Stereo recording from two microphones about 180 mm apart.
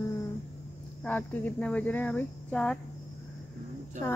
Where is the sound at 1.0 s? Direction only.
10° left (ahead or behind).